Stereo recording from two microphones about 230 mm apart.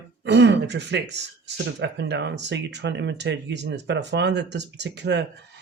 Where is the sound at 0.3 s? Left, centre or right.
Right.